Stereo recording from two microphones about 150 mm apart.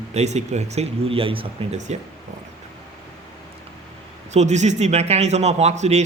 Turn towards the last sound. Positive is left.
turn(degrees=-50)  # may be behind; listen again after turning